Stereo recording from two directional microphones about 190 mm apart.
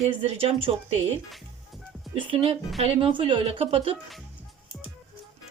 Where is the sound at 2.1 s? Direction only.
30° right (ahead or behind).